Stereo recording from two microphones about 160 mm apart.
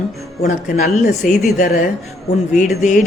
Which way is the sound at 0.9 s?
55° left (ahead or behind).